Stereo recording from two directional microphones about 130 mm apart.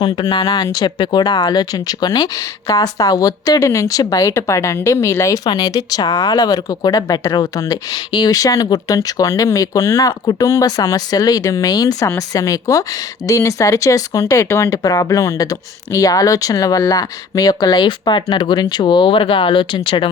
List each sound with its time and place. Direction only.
0.0 s speech: 40° left (ahead or behind)